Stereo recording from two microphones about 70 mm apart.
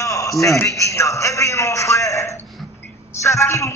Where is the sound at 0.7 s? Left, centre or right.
Left.